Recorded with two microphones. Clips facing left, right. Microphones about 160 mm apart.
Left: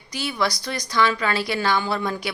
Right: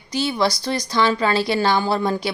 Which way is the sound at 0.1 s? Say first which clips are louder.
Right 5 dB; 30° right (ahead or behind).